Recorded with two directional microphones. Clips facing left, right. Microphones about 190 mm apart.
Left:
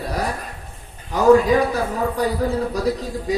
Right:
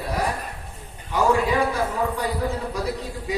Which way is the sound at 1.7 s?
35° left (ahead or behind).